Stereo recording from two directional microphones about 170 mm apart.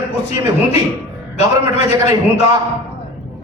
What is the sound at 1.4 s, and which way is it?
Speech, 40° left (ahead or behind).